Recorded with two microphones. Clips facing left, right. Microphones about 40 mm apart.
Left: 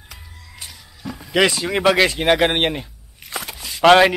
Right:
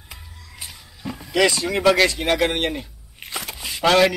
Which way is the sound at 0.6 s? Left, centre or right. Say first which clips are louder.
Even; centre.